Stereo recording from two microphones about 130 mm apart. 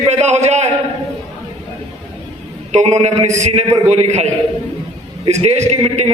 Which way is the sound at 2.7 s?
60° right (ahead or behind).